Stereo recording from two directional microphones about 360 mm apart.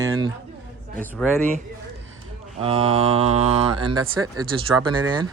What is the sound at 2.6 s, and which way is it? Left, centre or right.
Speech, centre.